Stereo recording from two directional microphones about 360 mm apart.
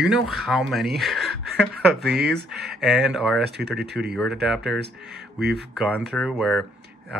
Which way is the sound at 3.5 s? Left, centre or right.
Right.